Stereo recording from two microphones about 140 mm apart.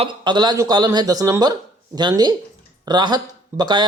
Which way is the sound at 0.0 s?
30° right (ahead or behind).